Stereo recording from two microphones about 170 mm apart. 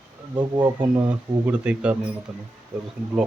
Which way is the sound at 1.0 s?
10° right (ahead or behind).